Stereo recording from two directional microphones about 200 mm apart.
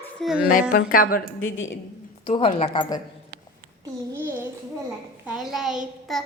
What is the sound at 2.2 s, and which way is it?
Speech, 30° left (ahead or behind).